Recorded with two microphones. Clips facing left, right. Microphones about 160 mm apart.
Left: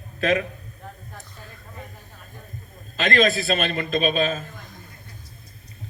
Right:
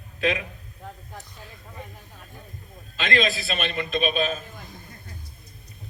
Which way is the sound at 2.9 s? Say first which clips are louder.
Left 4 dB; 45° left (ahead or behind).